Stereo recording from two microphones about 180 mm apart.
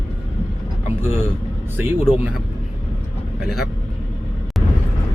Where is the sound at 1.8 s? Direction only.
10° right (ahead or behind).